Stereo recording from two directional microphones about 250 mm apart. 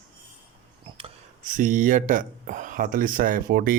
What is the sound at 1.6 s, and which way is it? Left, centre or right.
Speech, right.